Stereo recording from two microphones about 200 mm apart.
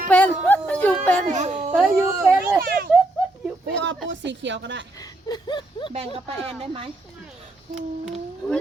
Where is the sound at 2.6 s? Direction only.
50° right (ahead or behind).